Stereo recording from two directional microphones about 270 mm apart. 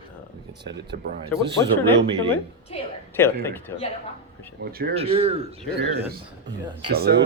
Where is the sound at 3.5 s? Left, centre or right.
Centre.